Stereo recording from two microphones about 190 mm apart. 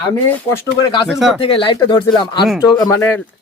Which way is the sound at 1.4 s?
25° left (ahead or behind).